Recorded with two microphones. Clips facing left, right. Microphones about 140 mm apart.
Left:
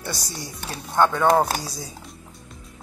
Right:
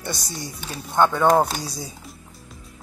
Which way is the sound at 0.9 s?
Centre (ahead or behind).